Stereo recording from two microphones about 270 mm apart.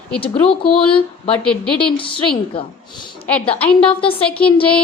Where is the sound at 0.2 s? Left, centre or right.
Left.